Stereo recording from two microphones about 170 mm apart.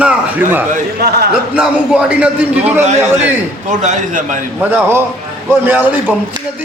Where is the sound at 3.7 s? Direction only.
45° right (ahead or behind).